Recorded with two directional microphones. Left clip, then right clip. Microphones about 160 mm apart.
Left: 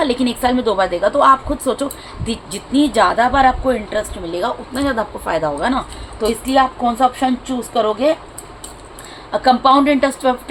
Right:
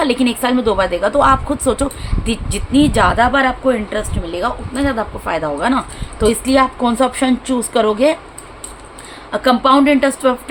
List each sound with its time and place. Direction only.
0.0 s a woman's voice: 20° right (ahead or behind)
6.1 s a woman's voice: 45° right (ahead or behind)
9.3 s a woman's voice: 25° right (ahead or behind)